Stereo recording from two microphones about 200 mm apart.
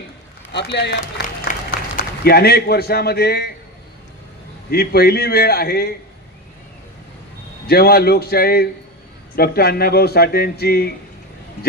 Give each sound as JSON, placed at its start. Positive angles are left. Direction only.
{"t": 0.5, "sound": "a man's voice", "side_deg": 60}
{"t": 1.5, "sound": "applause", "side_deg": 40}
{"t": 2.0, "sound": "a man's voice", "side_deg": 50}
{"t": 4.7, "sound": "a man's voice", "side_deg": 50}
{"t": 7.7, "sound": "a man's voice", "side_deg": 50}